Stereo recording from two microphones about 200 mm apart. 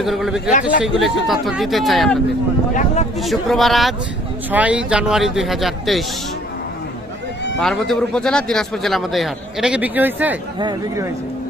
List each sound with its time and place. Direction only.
0.0 s a man's voice: centre (ahead or behind)
2.7 s speech: 35° left (ahead or behind)
3.2 s a man's voice: centre (ahead or behind)
7.6 s a man's voice: 5° left (ahead or behind); by 11.1 s 20° right (ahead or behind)